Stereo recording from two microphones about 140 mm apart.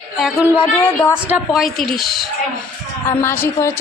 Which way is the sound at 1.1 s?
5° right (ahead or behind).